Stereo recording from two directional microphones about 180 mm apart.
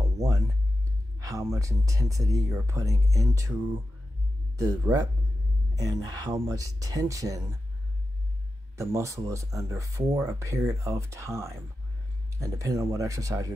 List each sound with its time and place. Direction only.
0.2 s a sound: 15° right (ahead or behind)
1.2 s speech: 20° right (ahead or behind)
8.7 s speech: 15° right (ahead or behind)